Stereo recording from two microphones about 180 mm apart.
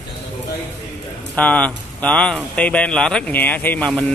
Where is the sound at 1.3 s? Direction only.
5° left (ahead or behind).